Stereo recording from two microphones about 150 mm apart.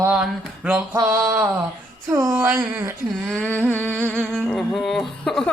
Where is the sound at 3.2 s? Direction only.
5° left (ahead or behind).